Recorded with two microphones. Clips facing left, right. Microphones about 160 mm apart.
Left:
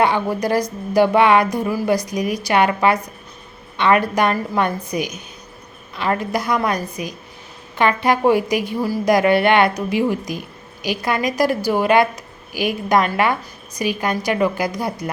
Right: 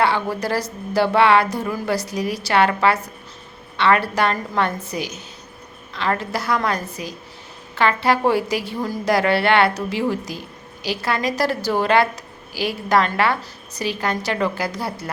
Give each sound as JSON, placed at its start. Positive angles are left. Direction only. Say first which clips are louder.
{"t": 0.0, "sound": "a woman's voice", "louder": "left 2 dB", "side_deg": 15}